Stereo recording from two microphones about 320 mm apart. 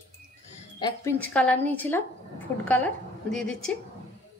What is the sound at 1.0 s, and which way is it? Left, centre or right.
Speech, centre.